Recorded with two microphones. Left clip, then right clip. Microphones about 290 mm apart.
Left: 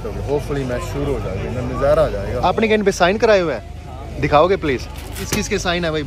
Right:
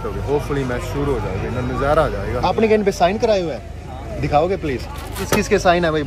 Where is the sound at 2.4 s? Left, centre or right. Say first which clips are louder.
Even; centre.